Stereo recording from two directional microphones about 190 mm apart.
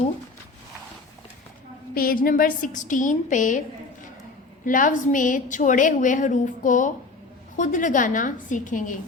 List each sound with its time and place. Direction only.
2.0 s a woman's voice: 50° left (ahead or behind)
4.6 s a woman's voice: 45° left (ahead or behind)